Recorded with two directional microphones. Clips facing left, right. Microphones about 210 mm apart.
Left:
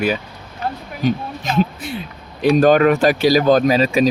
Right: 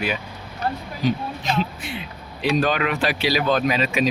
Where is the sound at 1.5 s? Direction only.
40° left (ahead or behind).